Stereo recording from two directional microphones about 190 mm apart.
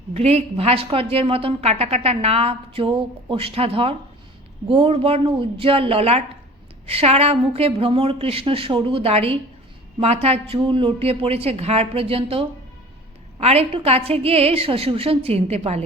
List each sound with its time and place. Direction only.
0.1 s a woman's voice: 30° right (ahead or behind)